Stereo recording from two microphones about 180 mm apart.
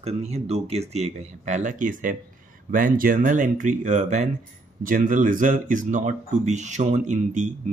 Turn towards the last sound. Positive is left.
turn(degrees=-40)  # may be behind; listen again after turning